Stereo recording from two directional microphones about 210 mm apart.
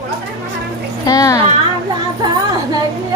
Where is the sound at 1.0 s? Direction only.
15° left (ahead or behind).